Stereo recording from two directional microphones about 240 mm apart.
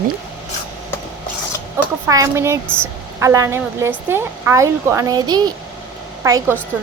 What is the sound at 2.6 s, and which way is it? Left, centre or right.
Speech, centre.